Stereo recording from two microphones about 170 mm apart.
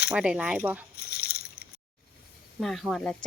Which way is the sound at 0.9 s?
70° left (ahead or behind).